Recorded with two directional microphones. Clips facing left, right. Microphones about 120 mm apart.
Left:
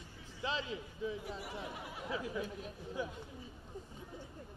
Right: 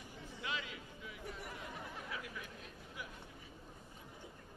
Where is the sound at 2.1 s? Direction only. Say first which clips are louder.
Left 8 dB; 30° left (ahead or behind).